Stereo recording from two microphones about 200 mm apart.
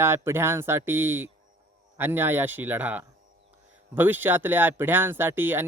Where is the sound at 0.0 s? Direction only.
10° right (ahead or behind).